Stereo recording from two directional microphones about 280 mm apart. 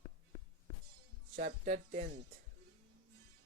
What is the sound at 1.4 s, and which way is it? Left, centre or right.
Speech, right.